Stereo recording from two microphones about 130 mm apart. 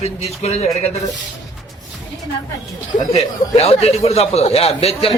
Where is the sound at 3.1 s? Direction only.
50° left (ahead or behind).